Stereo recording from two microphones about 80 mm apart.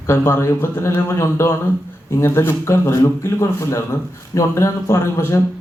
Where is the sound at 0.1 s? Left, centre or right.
Left.